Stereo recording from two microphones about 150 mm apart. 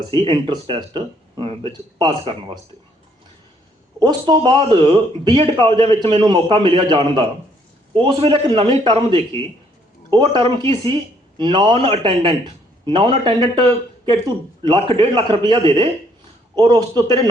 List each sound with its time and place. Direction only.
0.1 s a man's voice: 30° right (ahead or behind)
4.0 s a man's voice: 30° right (ahead or behind)